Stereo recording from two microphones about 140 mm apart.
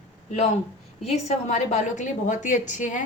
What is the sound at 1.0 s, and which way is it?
A woman's voice, 50° left (ahead or behind).